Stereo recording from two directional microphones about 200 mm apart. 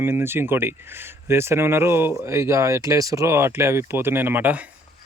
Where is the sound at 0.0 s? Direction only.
10° right (ahead or behind).